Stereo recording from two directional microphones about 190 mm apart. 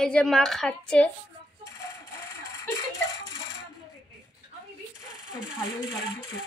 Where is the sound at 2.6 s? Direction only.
20° left (ahead or behind).